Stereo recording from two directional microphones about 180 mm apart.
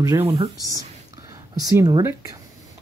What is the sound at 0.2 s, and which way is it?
Speech, 30° right (ahead or behind).